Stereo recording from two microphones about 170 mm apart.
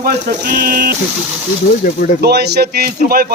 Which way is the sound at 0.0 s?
60° right (ahead or behind).